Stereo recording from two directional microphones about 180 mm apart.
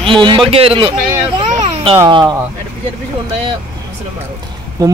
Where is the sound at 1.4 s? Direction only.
35° right (ahead or behind).